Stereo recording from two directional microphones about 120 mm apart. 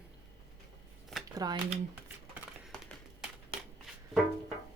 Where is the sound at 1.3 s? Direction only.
30° right (ahead or behind).